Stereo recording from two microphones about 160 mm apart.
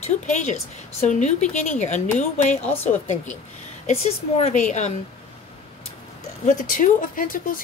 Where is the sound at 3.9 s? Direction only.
40° left (ahead or behind).